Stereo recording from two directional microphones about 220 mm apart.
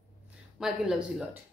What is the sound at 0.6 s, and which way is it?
Speech, centre (ahead or behind).